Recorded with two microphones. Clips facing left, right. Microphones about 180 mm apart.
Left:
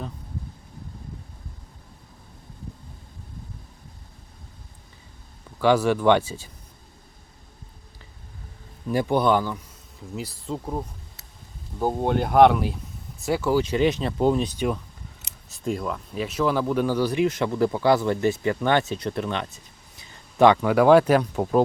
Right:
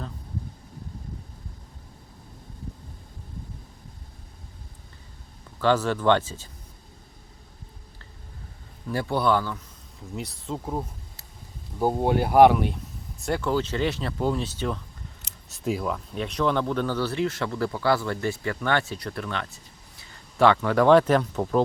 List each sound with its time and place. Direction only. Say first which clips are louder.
5.5 s speech: left 3 dB; 10° left (ahead or behind)
8.9 s speech: left 3 dB; 15° left (ahead or behind)
10.2 s speech: left 1 dB; centre (ahead or behind)
15.4 s speech: even; centre (ahead or behind)